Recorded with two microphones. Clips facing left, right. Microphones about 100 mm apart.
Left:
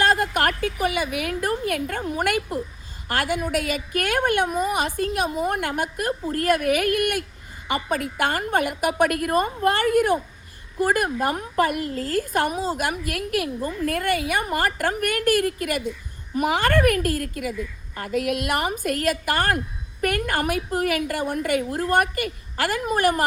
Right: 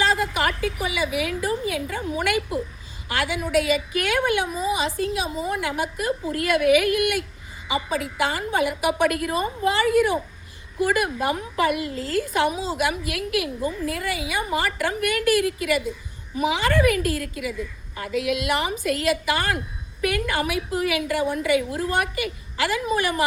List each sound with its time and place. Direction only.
0.0 s a woman's voice: 50° left (ahead or behind)